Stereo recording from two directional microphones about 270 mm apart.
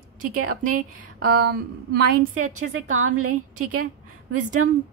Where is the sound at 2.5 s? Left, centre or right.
Right.